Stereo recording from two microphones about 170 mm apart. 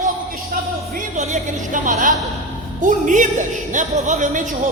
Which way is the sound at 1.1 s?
45° right (ahead or behind).